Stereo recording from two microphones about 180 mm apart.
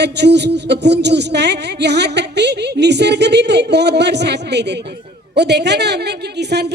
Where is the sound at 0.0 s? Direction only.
70° right (ahead or behind).